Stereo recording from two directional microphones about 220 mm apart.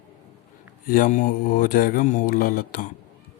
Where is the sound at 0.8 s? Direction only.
40° left (ahead or behind).